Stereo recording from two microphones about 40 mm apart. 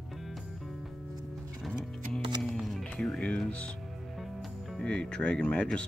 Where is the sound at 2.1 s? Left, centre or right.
Centre.